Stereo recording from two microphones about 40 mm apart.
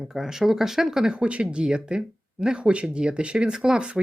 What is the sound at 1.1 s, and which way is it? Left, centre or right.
Speech, right.